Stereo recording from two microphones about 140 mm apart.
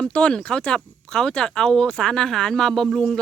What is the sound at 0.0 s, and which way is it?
Speech, 5° left (ahead or behind).